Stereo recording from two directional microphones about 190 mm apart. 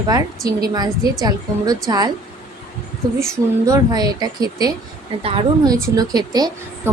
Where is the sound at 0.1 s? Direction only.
20° right (ahead or behind).